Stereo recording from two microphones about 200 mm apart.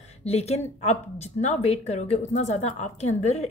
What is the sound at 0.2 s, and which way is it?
Speech, 30° left (ahead or behind).